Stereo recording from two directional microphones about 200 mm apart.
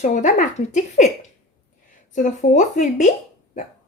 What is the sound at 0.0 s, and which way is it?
Speech, 35° left (ahead or behind).